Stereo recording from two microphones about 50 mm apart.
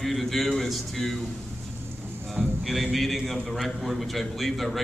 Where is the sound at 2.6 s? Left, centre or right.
Centre.